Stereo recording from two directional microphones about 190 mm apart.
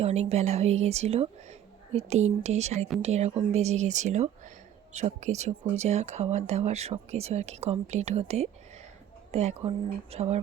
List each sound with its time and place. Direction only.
0.0 s speech: 35° right (ahead or behind)